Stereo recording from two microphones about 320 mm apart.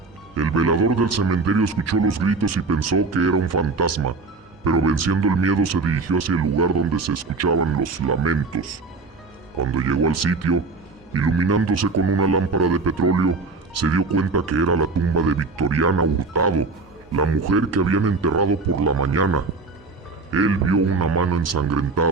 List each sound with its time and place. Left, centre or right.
0.3 s speech: right
9.7 s speech: right